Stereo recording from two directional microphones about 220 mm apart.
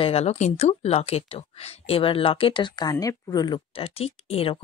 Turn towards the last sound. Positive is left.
turn(degrees=25)  # may be behind; listen again after turning